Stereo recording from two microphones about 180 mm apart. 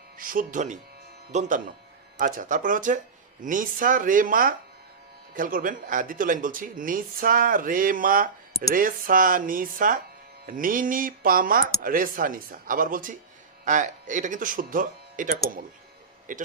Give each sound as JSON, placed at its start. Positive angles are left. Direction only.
{"t": 0.2, "sound": "speech", "side_deg": -50}